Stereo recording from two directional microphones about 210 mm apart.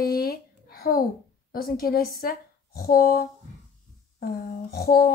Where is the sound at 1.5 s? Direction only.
45° left (ahead or behind).